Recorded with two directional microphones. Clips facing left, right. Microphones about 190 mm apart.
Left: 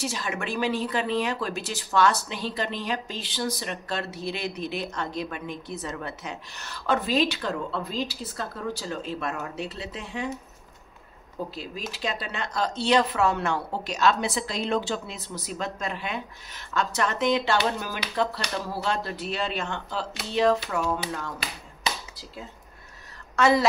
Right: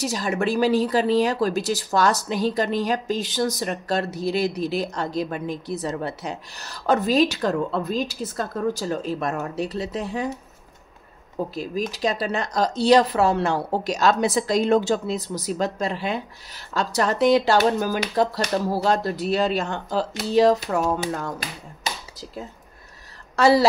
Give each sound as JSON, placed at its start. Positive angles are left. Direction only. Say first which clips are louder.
{"t": 0.0, "sound": "speech", "louder": "right 7 dB", "side_deg": -40}
{"t": 11.9, "sound": "speech", "louder": "right 5 dB", "side_deg": -40}
{"t": 23.3, "sound": "a woman's voice", "louder": "right 4 dB", "side_deg": -35}